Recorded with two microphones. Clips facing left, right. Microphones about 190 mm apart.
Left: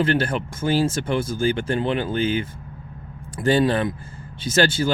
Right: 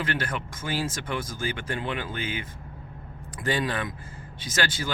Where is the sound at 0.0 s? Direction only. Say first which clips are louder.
Left 9 dB; 30° left (ahead or behind).